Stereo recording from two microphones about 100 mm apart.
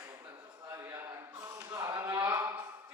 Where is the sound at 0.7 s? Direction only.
30° right (ahead or behind).